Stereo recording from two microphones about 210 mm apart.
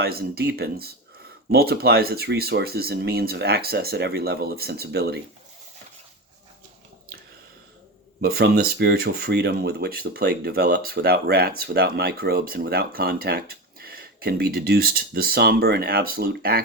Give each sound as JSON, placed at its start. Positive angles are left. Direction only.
{"t": 0.0, "sound": "speech", "side_deg": -45}
{"t": 8.2, "sound": "speech", "side_deg": -50}